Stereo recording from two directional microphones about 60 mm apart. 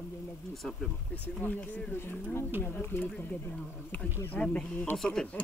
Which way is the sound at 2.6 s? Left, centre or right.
Left.